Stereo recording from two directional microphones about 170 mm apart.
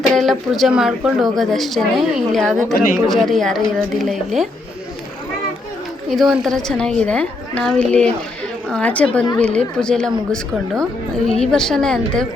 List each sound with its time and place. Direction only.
0.1 s a woman's voice: centre (ahead or behind)
2.7 s speech: 50° left (ahead or behind)
3.1 s a woman's voice: centre (ahead or behind)
6.1 s a woman's voice: centre (ahead or behind)